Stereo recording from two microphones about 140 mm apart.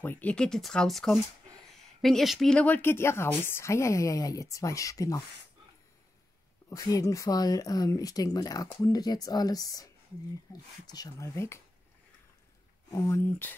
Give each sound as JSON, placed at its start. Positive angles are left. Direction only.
{"t": 0.0, "sound": "speech", "side_deg": 10}
{"t": 6.7, "sound": "speech", "side_deg": 25}
{"t": 12.9, "sound": "speech", "side_deg": 20}